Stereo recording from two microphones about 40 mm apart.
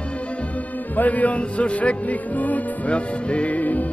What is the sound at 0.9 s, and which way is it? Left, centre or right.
Music, left.